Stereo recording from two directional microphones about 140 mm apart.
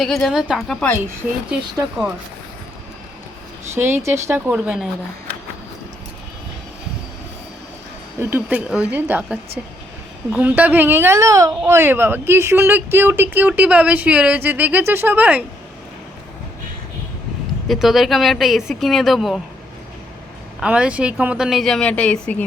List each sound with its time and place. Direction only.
0.0 s a woman's voice: centre (ahead or behind)
3.8 s speech: 15° right (ahead or behind)
8.2 s speech: 15° right (ahead or behind)
17.7 s a woman's voice: centre (ahead or behind)
20.6 s a woman's voice: 5° right (ahead or behind); by 22.4 s 10° left (ahead or behind)